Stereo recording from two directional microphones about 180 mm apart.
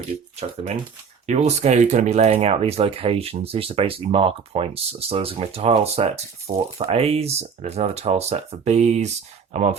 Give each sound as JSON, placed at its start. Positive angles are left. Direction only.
{"t": 0.4, "sound": "speech", "side_deg": -35}